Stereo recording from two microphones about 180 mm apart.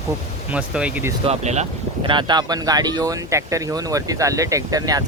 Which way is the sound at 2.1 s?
25° right (ahead or behind).